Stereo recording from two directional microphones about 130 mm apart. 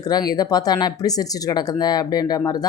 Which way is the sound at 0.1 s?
30° left (ahead or behind).